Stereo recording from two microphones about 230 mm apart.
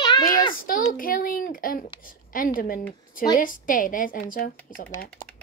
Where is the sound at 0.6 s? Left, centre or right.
Left.